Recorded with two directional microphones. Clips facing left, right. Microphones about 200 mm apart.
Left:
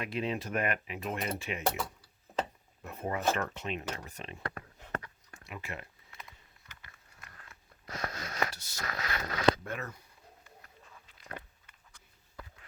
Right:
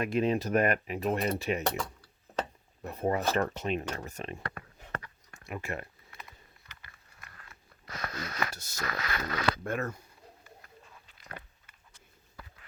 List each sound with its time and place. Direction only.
0.0 s speech: 45° right (ahead or behind)
1.6 s a sound: 5° left (ahead or behind)
2.8 s speech: 35° right (ahead or behind)
5.5 s speech: 50° right (ahead or behind)
7.9 s a sound: 30° left (ahead or behind)
9.6 s speech: 50° right (ahead or behind)